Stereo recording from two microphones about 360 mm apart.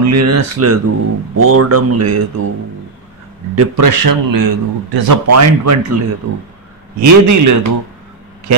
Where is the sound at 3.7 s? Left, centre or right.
Right.